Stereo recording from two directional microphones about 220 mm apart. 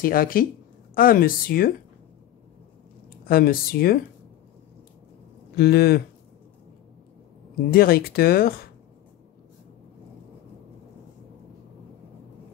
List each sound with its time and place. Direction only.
0.0 s speech: 40° left (ahead or behind)
3.3 s speech: 40° left (ahead or behind)
5.6 s speech: 45° left (ahead or behind)
7.7 s speech: 45° left (ahead or behind)